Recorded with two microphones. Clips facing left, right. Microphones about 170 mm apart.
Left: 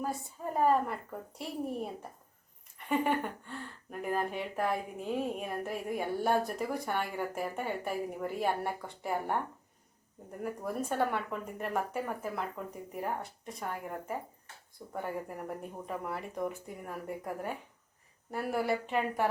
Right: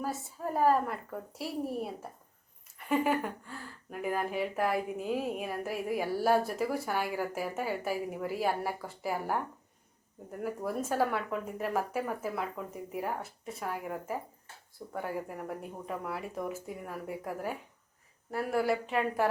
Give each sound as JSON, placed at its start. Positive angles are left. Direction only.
{"t": 0.0, "sound": "speech", "side_deg": 0}
{"t": 10.4, "sound": "speech", "side_deg": -5}